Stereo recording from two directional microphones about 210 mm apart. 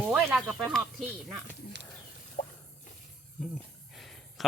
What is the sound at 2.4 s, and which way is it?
Drip, 40° left (ahead or behind).